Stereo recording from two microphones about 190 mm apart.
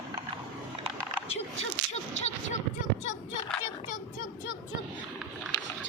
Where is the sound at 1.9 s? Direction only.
35° left (ahead or behind).